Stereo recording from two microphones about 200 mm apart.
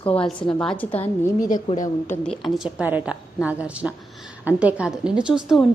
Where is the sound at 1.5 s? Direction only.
40° left (ahead or behind).